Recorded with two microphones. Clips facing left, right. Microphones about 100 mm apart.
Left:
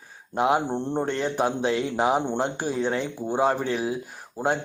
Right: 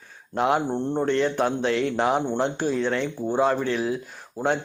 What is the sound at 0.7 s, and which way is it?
Speech, 20° left (ahead or behind).